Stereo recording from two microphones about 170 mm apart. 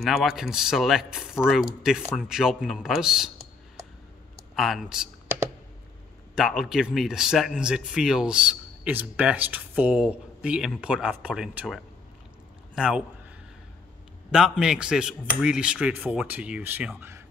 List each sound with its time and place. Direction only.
0.0 s speech: centre (ahead or behind)
4.6 s speech: centre (ahead or behind)
6.3 s a man's voice: centre (ahead or behind)
14.3 s speech: 5° right (ahead or behind)